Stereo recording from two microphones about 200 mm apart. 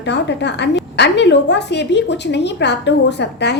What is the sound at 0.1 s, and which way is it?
A woman's voice, 60° left (ahead or behind).